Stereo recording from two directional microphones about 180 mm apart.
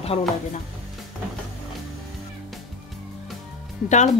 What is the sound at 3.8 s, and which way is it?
Speech, 40° left (ahead or behind).